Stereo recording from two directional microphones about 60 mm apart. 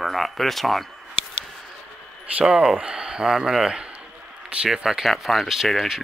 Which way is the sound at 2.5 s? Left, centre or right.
Centre.